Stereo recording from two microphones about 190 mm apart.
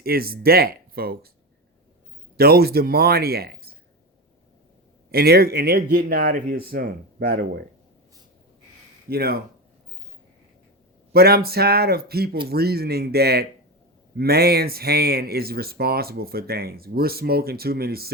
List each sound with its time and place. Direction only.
0.0 s speech: 50° right (ahead or behind)
2.3 s speech: 55° right (ahead or behind)
5.1 s speech: 55° right (ahead or behind)
9.0 s speech: 55° right (ahead or behind)
11.1 s speech: 55° right (ahead or behind)